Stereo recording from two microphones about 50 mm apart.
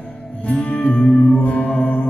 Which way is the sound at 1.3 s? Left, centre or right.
Left.